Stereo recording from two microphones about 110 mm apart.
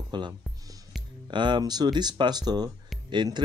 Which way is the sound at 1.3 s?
45° right (ahead or behind).